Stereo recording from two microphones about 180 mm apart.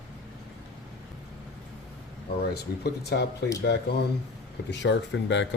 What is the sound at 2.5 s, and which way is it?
Speech, 65° left (ahead or behind).